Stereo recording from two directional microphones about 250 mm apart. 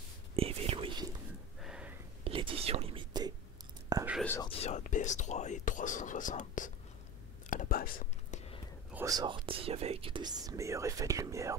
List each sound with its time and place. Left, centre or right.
0.4 s whispering: right
1.6 s a sound: centre
2.2 s whispering: right
4.2 s whispering: centre
4.5 s whispering: left
8.9 s speech: centre